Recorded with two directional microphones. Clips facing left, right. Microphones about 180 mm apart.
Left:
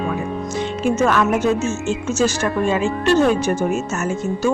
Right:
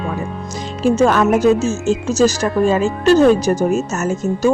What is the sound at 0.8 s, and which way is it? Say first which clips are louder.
Speech: right 5 dB; 35° right (ahead or behind).